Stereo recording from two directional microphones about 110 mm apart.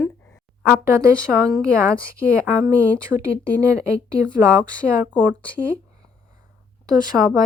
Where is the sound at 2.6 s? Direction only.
25° right (ahead or behind).